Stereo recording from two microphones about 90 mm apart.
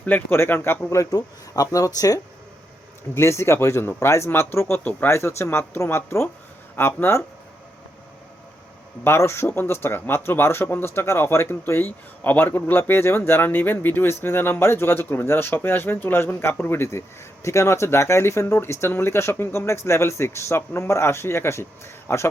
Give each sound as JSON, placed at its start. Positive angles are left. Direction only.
{"t": 0.0, "sound": "speech", "side_deg": 20}
{"t": 9.0, "sound": "speech", "side_deg": 30}